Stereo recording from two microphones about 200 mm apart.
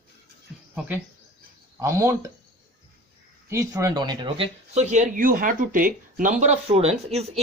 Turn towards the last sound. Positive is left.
turn(degrees=-30)  # may be behind; listen again after turning